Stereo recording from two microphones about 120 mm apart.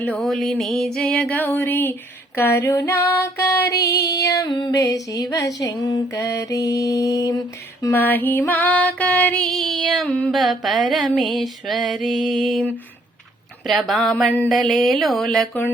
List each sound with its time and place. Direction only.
0.2 s music: centre (ahead or behind)
0.9 s a sound: 10° left (ahead or behind); by 7.9 s 30° left (ahead or behind)
7.9 s female singing: 15° left (ahead or behind)
10.2 s music: 5° left (ahead or behind)
13.7 s music: centre (ahead or behind)